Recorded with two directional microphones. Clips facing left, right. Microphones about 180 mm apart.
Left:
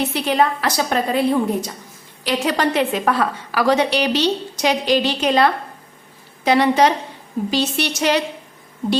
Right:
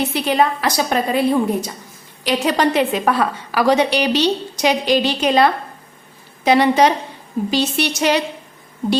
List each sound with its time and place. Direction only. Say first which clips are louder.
0.1 s a woman's voice: right 1 dB; 10° right (ahead or behind)